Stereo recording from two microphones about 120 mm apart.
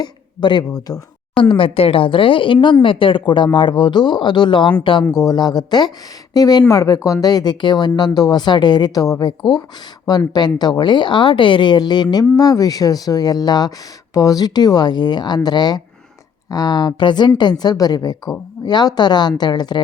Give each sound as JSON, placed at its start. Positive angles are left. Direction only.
{"t": 0.0, "sound": "a sound", "side_deg": 40}
{"t": 0.9, "sound": "speech", "side_deg": 30}
{"t": 1.4, "sound": "speech", "side_deg": 45}